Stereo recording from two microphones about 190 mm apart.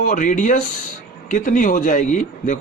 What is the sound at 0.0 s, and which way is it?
Speech, 40° left (ahead or behind).